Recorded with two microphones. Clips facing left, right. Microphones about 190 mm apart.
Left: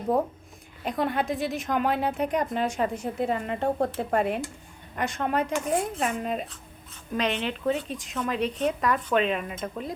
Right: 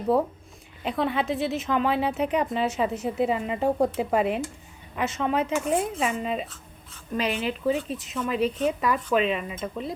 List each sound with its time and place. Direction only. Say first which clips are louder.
0.9 s speech: right 1 dB; centre (ahead or behind)